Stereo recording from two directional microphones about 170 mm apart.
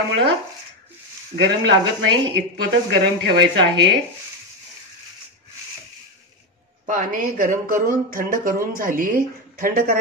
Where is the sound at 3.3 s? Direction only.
90° right.